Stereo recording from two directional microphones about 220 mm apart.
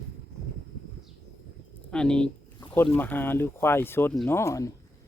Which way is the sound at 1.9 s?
5° left (ahead or behind).